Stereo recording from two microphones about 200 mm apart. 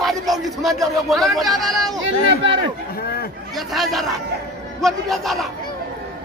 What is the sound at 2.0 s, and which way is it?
Speech, 65° right (ahead or behind).